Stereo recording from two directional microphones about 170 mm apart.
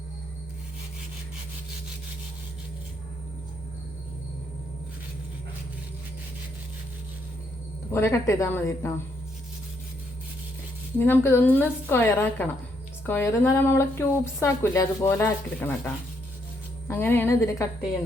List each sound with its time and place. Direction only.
7.9 s a woman's voice: 15° left (ahead or behind)
10.9 s a woman's voice: 10° left (ahead or behind)
16.9 s a woman's voice: 15° left (ahead or behind)